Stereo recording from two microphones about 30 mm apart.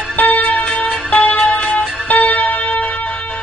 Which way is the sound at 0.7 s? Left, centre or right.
Left.